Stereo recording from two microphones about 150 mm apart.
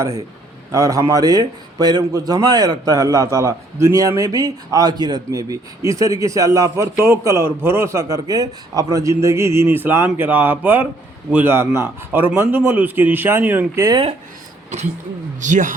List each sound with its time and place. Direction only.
0.0 s a man's voice: 25° right (ahead or behind)
13.7 s a man's voice: 25° right (ahead or behind)
15.4 s a man's voice: 55° right (ahead or behind)